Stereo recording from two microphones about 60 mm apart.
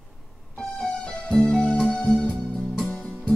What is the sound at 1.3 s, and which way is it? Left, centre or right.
Music, centre.